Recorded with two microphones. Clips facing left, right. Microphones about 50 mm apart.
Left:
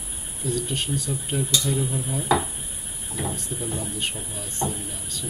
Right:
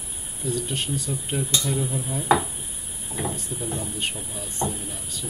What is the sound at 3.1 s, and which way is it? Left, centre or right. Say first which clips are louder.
Speech: even; centre.